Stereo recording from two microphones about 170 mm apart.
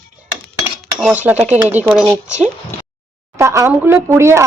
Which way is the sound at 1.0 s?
10° right (ahead or behind).